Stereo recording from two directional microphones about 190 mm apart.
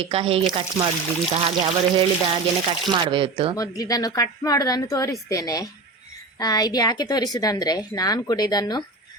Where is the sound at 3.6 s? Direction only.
20° left (ahead or behind).